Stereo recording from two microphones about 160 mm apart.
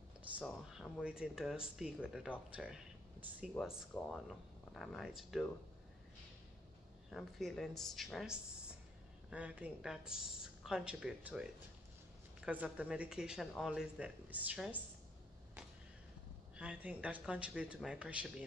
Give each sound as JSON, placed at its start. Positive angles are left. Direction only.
{"t": 0.2, "sound": "speech", "side_deg": -5}
{"t": 3.9, "sound": "speech", "side_deg": 10}
{"t": 7.1, "sound": "speech", "side_deg": 0}
{"t": 16.5, "sound": "speech", "side_deg": -10}